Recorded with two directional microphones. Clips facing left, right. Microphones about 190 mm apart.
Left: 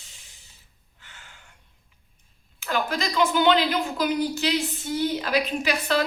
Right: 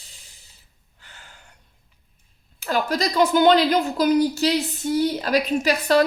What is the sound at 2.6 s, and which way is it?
Speech, 40° right (ahead or behind).